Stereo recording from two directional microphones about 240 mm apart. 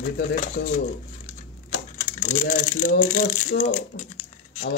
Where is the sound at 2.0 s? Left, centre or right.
Left.